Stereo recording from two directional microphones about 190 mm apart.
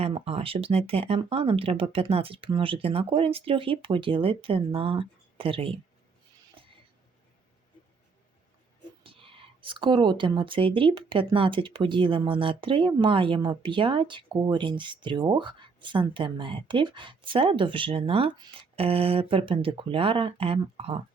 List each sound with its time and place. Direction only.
0.0 s speech: 30° right (ahead or behind)
9.0 s speech: 30° right (ahead or behind)